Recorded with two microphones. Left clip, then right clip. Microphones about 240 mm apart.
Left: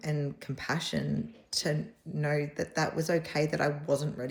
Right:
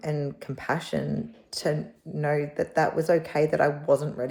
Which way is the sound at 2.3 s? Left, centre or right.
Right.